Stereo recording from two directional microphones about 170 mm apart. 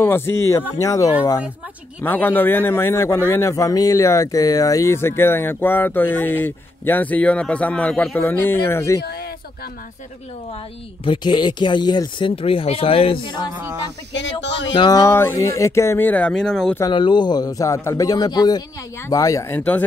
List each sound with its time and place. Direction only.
0.0 s speech: 15° left (ahead or behind)
9.0 s a sound: 65° left (ahead or behind)
11.1 s speech: 25° left (ahead or behind)
14.1 s speech: 90° left
14.7 s speech: 25° left (ahead or behind); by 16.7 s centre (ahead or behind)
16.9 s speech: 25° left (ahead or behind); by 19.8 s 10° left (ahead or behind)